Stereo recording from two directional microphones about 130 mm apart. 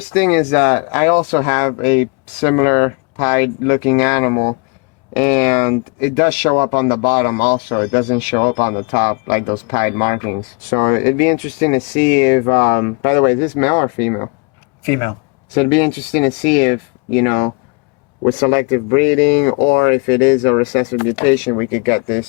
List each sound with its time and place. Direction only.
0.1 s speech: 20° left (ahead or behind)